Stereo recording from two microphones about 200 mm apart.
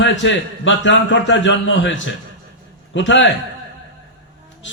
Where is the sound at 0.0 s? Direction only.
65° left (ahead or behind).